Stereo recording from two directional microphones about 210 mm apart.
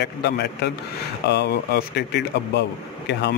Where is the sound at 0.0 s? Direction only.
50° left (ahead or behind).